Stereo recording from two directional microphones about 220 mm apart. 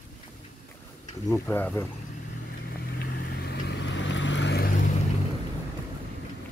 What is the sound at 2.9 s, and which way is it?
Vehicle, 45° left (ahead or behind).